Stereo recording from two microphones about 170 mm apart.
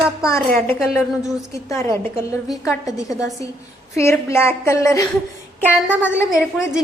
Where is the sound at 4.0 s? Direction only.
15° left (ahead or behind).